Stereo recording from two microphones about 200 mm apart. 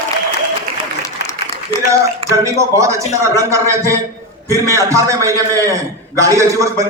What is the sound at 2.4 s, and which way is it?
A man's voice, 15° right (ahead or behind).